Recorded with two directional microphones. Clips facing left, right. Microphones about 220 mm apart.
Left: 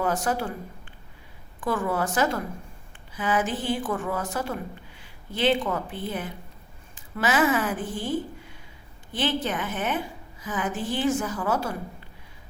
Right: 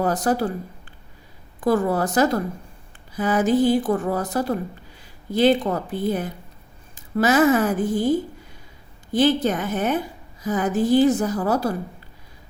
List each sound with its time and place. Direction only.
0.0 s speech: 35° right (ahead or behind)
1.6 s speech: 40° right (ahead or behind)